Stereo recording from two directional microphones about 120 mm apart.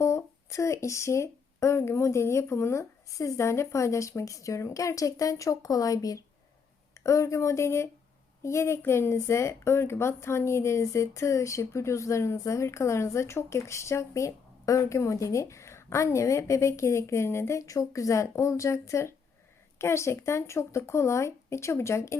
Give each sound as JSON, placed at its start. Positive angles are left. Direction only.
{"t": 0.0, "sound": "a woman's voice", "side_deg": 25}